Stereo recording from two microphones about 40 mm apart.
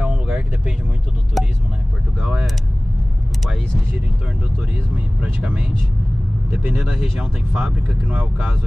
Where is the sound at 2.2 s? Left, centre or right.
Centre.